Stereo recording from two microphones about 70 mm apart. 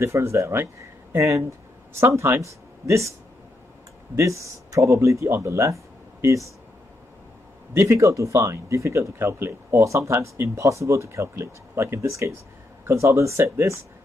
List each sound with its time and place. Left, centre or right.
0.0 s speech: right
4.2 s speech: right
7.7 s speech: right